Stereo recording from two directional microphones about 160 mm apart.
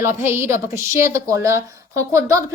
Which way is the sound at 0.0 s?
15° right (ahead or behind).